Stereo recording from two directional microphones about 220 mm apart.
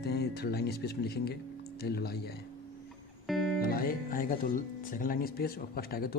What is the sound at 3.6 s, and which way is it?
Speech, 40° left (ahead or behind).